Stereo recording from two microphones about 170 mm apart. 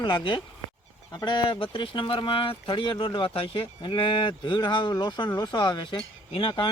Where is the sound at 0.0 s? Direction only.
30° left (ahead or behind).